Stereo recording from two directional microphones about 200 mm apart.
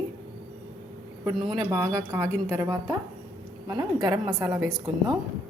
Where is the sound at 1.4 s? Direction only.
20° right (ahead or behind).